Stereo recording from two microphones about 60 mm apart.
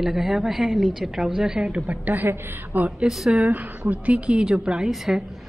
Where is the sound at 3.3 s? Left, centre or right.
Right.